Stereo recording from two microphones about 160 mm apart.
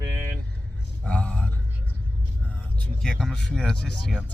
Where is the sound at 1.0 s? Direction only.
10° left (ahead or behind).